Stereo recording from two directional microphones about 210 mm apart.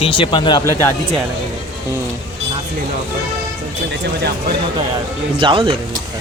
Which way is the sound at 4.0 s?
50° right (ahead or behind).